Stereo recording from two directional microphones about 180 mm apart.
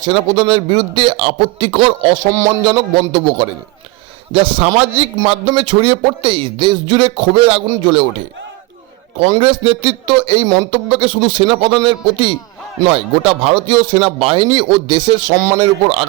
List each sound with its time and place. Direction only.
0.0 s speech: 30° right (ahead or behind)
9.3 s speech: 30° right (ahead or behind)